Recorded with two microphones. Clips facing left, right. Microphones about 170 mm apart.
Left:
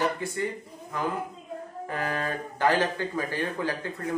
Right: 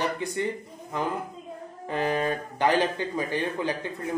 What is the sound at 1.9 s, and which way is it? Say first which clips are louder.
Speech: right 5 dB; 20° right (ahead or behind).